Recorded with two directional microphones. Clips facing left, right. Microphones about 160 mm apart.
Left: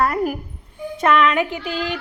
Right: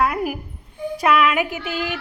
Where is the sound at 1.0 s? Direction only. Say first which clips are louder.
Left 1 dB; 5° right (ahead or behind).